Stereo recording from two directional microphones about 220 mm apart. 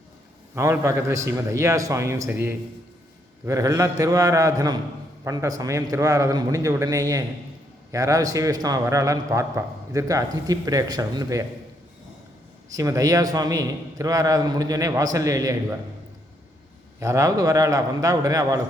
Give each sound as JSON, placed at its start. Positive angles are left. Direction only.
{"t": 0.5, "sound": "a man's voice", "side_deg": -15}
{"t": 12.7, "sound": "a man's voice", "side_deg": -15}
{"t": 17.0, "sound": "a man's voice", "side_deg": -15}